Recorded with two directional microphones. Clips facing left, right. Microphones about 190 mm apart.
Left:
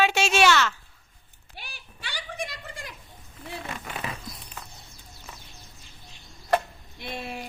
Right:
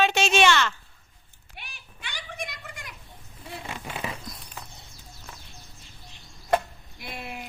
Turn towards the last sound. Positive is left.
turn(degrees=25)  # may be behind; listen again after turning